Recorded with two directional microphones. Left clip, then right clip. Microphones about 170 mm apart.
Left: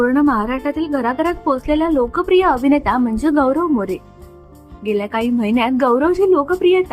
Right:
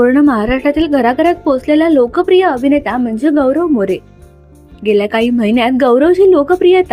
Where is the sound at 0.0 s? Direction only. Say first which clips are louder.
Right 5 dB; 25° right (ahead or behind).